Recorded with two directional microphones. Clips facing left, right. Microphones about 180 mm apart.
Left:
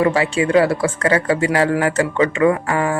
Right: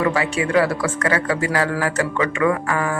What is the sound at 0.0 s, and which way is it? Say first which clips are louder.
A man's voice: left 4 dB; 30° left (ahead or behind).